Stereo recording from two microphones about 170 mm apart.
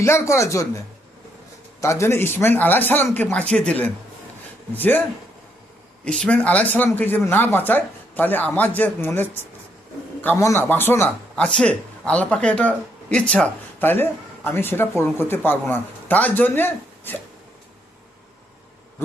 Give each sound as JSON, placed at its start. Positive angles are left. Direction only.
{"t": 0.0, "sound": "speech", "side_deg": 15}
{"t": 1.8, "sound": "speech", "side_deg": 15}
{"t": 6.1, "sound": "speech", "side_deg": 5}